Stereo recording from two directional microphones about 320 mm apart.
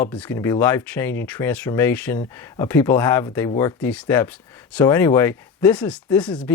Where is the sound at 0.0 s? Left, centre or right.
Centre.